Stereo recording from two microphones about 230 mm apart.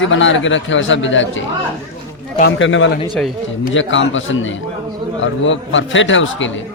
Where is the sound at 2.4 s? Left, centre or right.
Left.